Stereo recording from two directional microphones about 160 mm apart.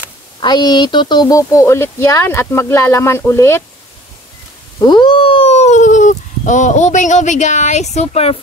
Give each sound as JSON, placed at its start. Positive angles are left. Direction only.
{"t": 0.4, "sound": "speech", "side_deg": 25}
{"t": 4.7, "sound": "speech", "side_deg": 30}